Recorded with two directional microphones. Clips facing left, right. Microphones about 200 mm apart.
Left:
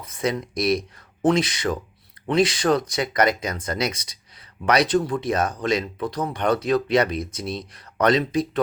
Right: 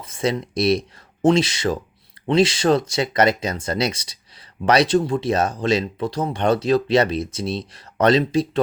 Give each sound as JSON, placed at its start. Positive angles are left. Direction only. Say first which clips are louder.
{"t": 0.0, "sound": "speech", "louder": "right 2 dB", "side_deg": -30}